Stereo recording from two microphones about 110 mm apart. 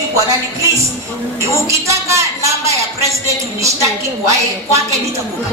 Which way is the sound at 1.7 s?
25° right (ahead or behind).